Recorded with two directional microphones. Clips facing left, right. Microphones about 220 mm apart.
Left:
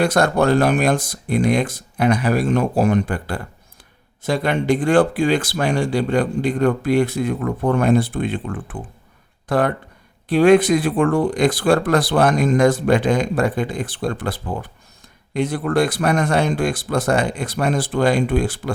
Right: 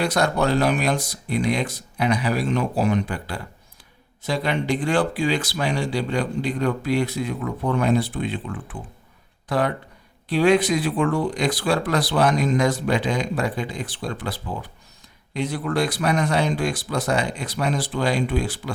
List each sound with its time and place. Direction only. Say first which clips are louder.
0.0 s speech: left 5 dB; 50° left (ahead or behind)